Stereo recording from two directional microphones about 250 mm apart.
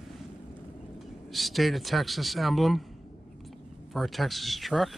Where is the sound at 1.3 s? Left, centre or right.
Centre.